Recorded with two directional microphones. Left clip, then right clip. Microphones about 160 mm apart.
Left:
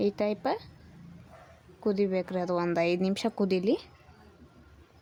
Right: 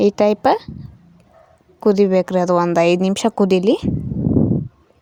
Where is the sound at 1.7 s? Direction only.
65° right (ahead or behind).